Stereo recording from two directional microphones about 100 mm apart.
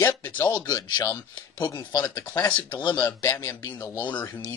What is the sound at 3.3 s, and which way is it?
Speech, 25° left (ahead or behind).